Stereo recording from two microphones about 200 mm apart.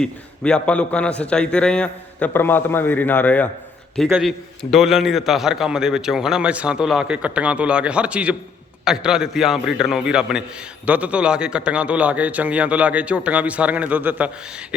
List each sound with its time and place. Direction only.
0.0 s a man's voice: 5° left (ahead or behind)